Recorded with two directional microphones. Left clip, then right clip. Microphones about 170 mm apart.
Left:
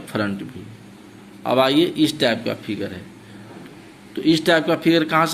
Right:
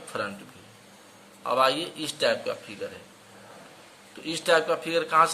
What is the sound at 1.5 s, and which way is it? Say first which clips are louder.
A man's voice: left 7 dB; 15° left (ahead or behind).